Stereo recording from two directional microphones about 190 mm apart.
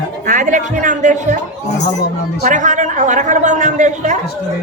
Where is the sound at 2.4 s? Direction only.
40° right (ahead or behind).